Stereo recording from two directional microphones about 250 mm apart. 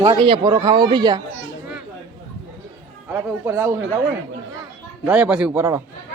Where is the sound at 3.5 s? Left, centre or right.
Centre.